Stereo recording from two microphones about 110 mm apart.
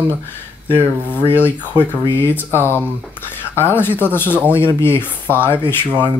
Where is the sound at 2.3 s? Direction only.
20° left (ahead or behind).